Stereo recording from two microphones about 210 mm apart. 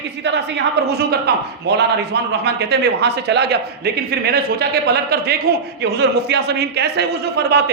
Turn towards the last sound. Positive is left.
turn(degrees=-55)  # may be behind; listen again after turning